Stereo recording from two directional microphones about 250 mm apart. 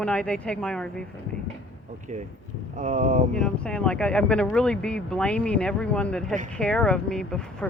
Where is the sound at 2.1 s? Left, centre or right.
Right.